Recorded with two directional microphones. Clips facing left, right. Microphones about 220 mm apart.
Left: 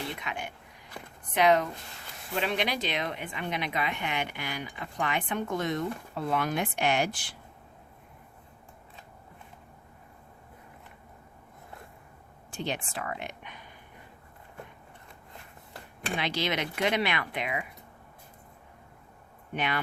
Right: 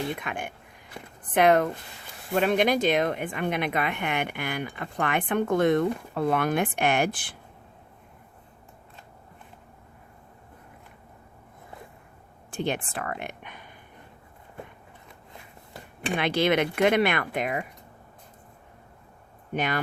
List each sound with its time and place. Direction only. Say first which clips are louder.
0.2 s speech: right 4 dB; 50° right (ahead or behind)
12.5 s speech: right 5 dB; 55° right (ahead or behind)
16.1 s speech: right 8 dB; 55° right (ahead or behind)
19.5 s speech: right 4 dB; 45° right (ahead or behind)